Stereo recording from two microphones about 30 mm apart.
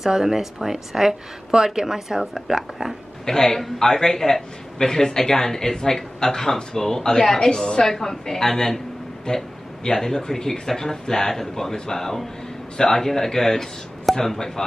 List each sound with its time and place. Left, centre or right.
0.1 s a woman's voice: centre
3.3 s a man's voice: centre